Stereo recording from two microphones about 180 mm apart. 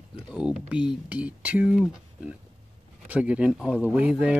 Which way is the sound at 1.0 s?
10° right (ahead or behind).